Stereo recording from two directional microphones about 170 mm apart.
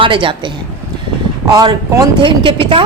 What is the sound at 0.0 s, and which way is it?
A woman's voice, 30° right (ahead or behind).